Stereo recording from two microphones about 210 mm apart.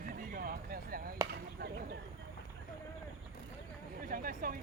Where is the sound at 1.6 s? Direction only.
50° right (ahead or behind).